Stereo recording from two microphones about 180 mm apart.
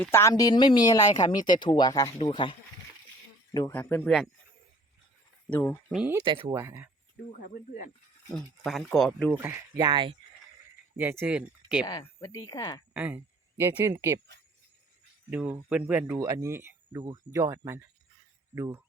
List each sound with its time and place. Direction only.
0.0 s speech: 15° left (ahead or behind)
3.5 s speech: 15° left (ahead or behind)
5.5 s speech: 15° left (ahead or behind)
6.2 s speech: 30° right (ahead or behind)
6.5 s speech: 15° right (ahead or behind)
7.5 s speech: 45° left (ahead or behind)
8.3 s speech: centre (ahead or behind)
9.3 s speech: 15° right (ahead or behind)
9.9 s speech: 25° right (ahead or behind)
10.9 s speech: 10° right (ahead or behind)
11.9 s speech: 20° left (ahead or behind)
12.9 s speech: 5° right (ahead or behind)
15.3 s speech: 10° right (ahead or behind)